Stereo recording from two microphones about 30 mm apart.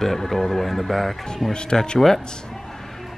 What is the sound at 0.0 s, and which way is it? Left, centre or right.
Speech, centre.